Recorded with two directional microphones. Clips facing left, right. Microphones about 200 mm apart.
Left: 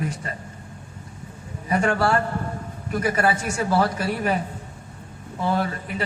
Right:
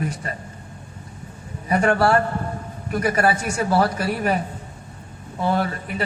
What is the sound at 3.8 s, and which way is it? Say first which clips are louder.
Speech: right 2 dB; 60° right (ahead or behind).